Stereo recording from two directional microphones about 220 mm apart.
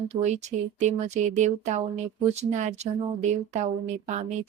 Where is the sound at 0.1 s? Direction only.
30° right (ahead or behind).